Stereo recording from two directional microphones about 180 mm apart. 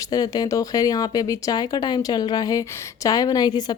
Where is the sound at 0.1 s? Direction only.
20° left (ahead or behind).